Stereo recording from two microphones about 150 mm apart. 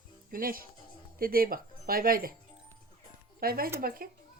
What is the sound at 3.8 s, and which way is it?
Speech, 75° right (ahead or behind).